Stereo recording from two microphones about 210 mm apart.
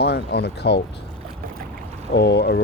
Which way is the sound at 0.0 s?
50° left (ahead or behind).